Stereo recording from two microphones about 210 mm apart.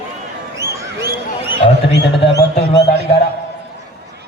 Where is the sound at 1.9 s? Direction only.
55° left (ahead or behind).